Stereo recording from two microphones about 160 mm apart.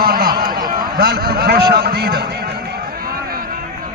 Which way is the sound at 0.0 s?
70° right (ahead or behind).